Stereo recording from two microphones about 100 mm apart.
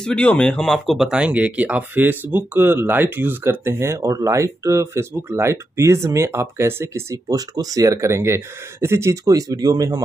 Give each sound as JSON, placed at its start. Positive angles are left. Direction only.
{"t": 0.0, "sound": "speech", "side_deg": 10}